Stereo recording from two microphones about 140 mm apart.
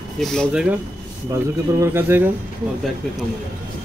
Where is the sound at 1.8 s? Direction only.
15° right (ahead or behind).